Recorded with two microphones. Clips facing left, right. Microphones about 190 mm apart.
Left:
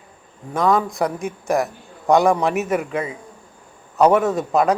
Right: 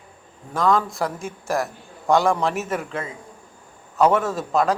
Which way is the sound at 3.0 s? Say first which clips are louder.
Left 5 dB; 15° left (ahead or behind).